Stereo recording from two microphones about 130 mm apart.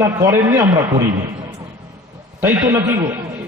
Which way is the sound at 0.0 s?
25° right (ahead or behind).